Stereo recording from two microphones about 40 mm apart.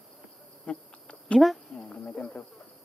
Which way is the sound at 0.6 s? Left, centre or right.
Left.